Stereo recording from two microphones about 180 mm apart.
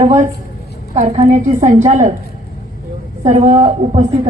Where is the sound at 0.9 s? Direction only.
40° right (ahead or behind).